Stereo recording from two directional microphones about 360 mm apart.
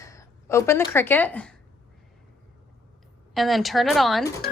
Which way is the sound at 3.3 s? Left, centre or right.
Centre.